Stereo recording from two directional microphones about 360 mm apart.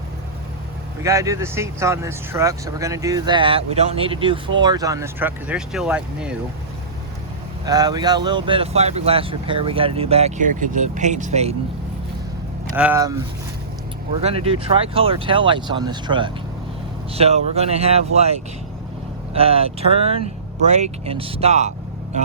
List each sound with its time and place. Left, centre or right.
1.0 s speech: centre
7.6 s speech: centre
12.7 s speech: centre
14.2 s speech: centre